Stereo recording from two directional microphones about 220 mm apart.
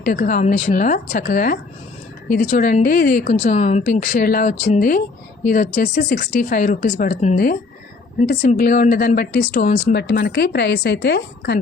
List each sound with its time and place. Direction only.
0.0 s speech: 40° left (ahead or behind)